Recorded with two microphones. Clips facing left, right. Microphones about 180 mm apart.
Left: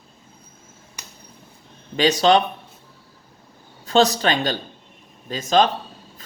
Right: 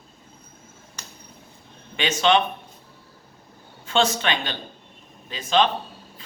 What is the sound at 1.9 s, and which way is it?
Speech, 35° left (ahead or behind).